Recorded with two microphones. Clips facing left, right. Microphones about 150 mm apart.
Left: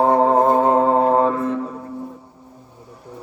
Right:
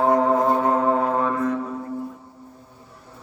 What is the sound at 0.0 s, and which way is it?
Music, 30° left (ahead or behind).